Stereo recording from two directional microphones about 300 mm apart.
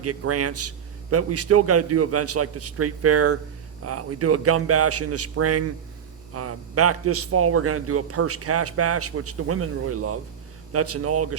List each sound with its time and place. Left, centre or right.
0.0 s a man's voice: right